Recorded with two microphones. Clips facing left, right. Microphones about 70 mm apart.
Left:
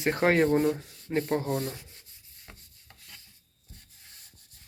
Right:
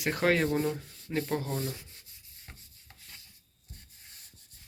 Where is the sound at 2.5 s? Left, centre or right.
Left.